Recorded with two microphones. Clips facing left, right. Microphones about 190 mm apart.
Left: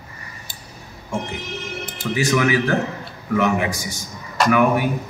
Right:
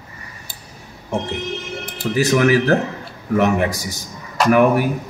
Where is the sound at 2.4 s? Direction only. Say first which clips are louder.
Right 7 dB; 40° right (ahead or behind).